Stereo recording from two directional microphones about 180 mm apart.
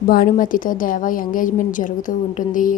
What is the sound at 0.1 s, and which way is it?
A woman's voice, 50° left (ahead or behind).